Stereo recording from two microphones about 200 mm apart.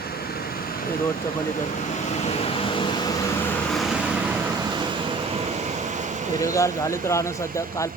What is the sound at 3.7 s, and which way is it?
Vehicle, 5° right (ahead or behind).